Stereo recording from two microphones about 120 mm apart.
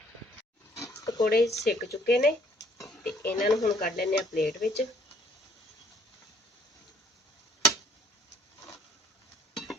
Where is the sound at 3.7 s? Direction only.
90° left.